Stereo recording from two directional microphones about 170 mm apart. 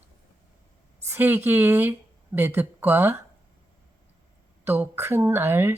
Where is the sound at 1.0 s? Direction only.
15° right (ahead or behind).